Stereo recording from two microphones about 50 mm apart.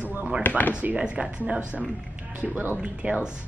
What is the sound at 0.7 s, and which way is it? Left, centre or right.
Speech, right.